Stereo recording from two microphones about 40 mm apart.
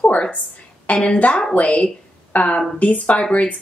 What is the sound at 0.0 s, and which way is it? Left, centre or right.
A woman's voice, left.